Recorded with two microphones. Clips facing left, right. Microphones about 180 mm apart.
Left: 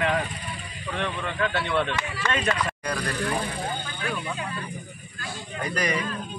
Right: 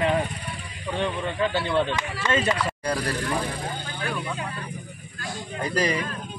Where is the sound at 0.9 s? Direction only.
25° right (ahead or behind).